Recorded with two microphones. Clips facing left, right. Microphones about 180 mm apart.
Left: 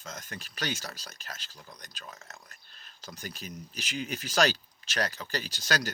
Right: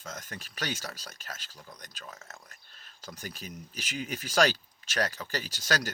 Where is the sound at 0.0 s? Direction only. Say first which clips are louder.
Right 1 dB; 45° right (ahead or behind).